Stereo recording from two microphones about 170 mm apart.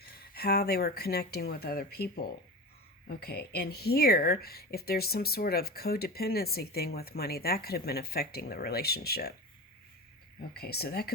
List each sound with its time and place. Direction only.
0.0 s speech: 65° left (ahead or behind)
10.5 s speech: 65° left (ahead or behind)